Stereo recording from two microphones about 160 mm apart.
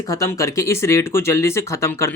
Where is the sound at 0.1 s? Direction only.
20° left (ahead or behind).